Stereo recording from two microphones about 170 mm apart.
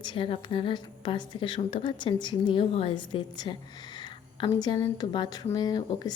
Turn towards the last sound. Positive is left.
turn(degrees=25)  # may be behind; listen again after turning